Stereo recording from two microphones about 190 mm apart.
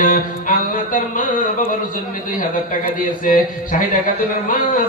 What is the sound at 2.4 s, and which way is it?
A man's voice, 45° left (ahead or behind).